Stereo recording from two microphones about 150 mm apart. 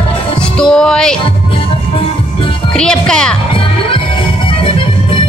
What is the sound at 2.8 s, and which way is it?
Music, 5° left (ahead or behind).